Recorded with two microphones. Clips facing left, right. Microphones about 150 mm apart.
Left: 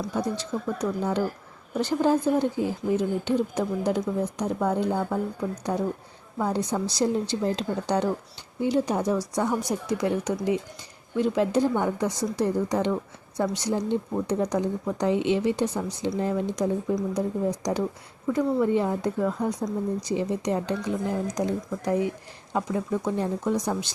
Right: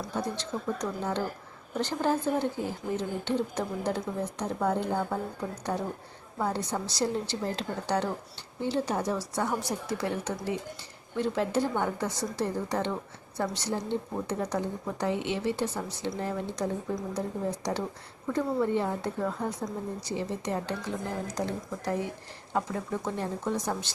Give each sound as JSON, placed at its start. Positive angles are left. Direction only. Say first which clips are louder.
{"t": 0.3, "sound": "a woman's voice", "louder": "left 3 dB", "side_deg": 10}